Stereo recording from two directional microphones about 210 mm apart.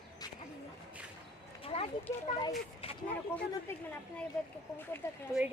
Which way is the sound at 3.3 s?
10° left (ahead or behind).